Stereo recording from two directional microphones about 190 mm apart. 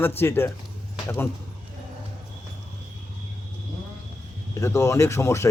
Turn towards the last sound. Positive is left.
turn(degrees=15)  # may be behind; listen again after turning